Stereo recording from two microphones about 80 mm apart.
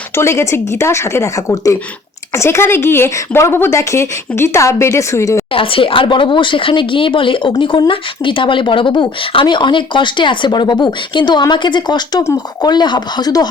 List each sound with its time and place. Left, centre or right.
0.2 s speech: left
5.5 s speech: left